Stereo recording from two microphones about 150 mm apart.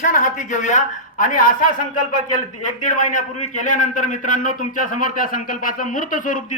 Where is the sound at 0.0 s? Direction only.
60° left (ahead or behind).